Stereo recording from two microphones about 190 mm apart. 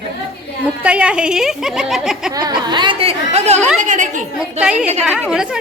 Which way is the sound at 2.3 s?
20° right (ahead or behind).